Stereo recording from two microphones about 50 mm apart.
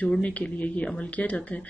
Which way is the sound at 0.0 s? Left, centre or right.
Left.